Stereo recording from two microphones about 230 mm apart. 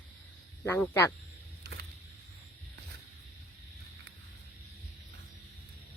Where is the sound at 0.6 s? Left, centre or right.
Centre.